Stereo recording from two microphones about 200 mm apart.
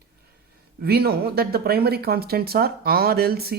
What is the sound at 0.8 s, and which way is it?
Speech, 50° right (ahead or behind).